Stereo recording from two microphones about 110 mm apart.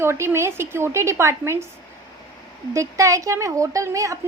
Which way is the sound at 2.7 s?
30° right (ahead or behind).